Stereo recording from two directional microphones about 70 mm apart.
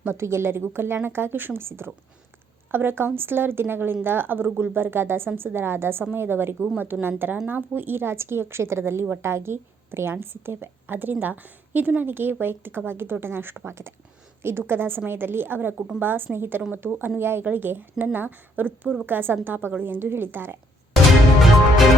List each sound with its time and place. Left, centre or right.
0.0 s a woman's voice: right